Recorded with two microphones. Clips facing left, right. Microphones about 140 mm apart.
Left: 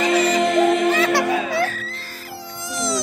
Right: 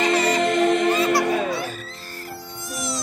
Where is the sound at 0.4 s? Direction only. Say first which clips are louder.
Left 2 dB; 5° left (ahead or behind).